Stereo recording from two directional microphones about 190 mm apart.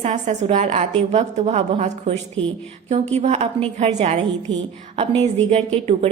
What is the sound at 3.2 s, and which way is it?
A woman's voice, 35° right (ahead or behind).